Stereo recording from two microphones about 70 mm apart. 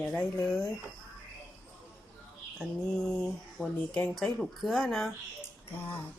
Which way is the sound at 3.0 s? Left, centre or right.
Centre.